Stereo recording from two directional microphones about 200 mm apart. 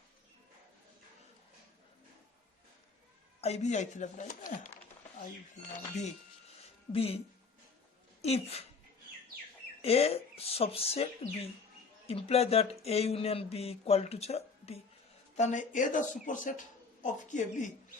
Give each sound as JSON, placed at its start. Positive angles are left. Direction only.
{"t": 3.4, "sound": "speech", "side_deg": 35}
{"t": 6.9, "sound": "speech", "side_deg": 30}
{"t": 8.2, "sound": "speech", "side_deg": 30}
{"t": 9.8, "sound": "speech", "side_deg": 30}